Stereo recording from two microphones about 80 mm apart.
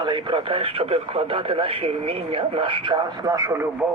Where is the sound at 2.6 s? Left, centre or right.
Right.